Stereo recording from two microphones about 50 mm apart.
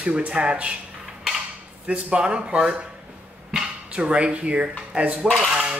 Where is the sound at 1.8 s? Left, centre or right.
Right.